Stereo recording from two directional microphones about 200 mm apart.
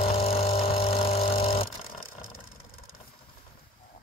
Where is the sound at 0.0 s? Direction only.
30° left (ahead or behind).